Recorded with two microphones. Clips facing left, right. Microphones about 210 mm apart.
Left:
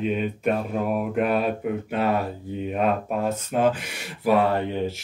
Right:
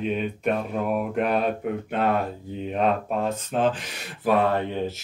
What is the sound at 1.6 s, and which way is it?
Speech, 5° left (ahead or behind).